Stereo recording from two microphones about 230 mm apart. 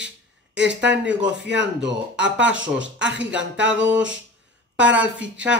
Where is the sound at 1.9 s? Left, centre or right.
Right.